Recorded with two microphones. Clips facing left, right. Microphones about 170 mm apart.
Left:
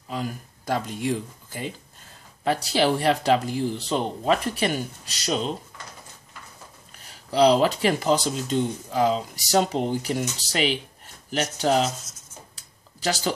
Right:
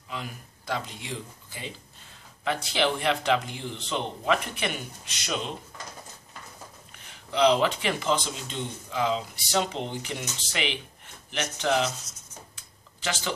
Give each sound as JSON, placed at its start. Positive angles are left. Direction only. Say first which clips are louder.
{"t": 0.1, "sound": "speech", "louder": "left 7 dB", "side_deg": 40}
{"t": 7.1, "sound": "speech", "louder": "left 4 dB", "side_deg": 35}
{"t": 12.5, "sound": "tick-tock", "louder": "left 2 dB", "side_deg": 35}